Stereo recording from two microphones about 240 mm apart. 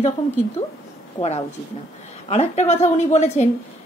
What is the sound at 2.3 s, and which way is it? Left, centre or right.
Speech, left.